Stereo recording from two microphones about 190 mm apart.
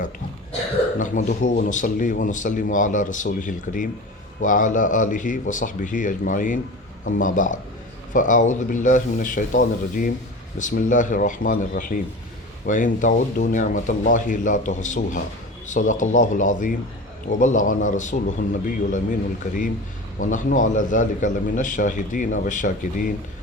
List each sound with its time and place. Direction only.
0.9 s a man's voice: 40° left (ahead or behind)